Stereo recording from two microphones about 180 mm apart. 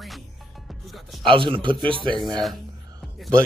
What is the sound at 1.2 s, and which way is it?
Speech, 30° right (ahead or behind).